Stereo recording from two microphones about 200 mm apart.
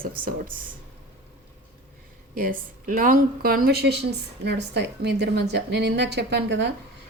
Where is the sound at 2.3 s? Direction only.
45° right (ahead or behind).